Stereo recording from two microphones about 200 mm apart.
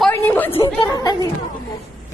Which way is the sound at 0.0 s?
10° left (ahead or behind).